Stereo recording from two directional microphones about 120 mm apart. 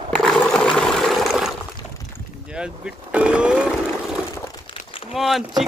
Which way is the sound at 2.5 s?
10° right (ahead or behind).